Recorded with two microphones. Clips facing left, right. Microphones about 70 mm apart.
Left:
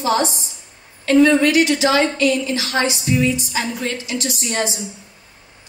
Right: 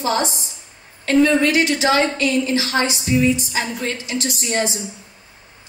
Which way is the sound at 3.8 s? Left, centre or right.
Right.